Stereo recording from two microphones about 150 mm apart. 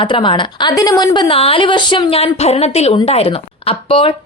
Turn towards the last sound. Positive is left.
turn(degrees=35)  # may be behind; listen again after turning